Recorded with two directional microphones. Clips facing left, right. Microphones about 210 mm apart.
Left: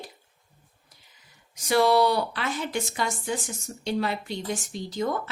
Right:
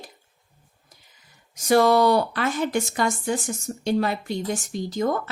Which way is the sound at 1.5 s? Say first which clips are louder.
Right 3 dB; 45° right (ahead or behind).